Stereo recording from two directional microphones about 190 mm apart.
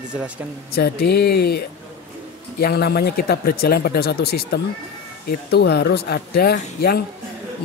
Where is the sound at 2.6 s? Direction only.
55° left (ahead or behind).